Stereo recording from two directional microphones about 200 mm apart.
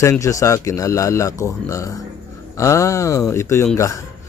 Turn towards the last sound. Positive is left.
turn(degrees=15)  # may be behind; listen again after turning